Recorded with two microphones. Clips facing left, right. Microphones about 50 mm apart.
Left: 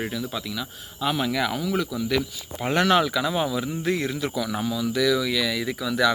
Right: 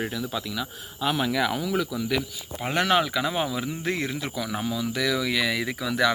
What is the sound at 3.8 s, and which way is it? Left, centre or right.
Speech, right.